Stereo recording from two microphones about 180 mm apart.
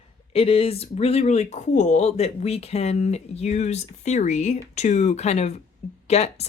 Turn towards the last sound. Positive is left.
turn(degrees=35)  # may be behind; listen again after turning